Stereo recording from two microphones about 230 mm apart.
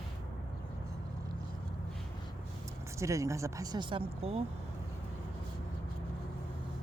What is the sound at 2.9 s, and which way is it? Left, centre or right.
Speech, centre.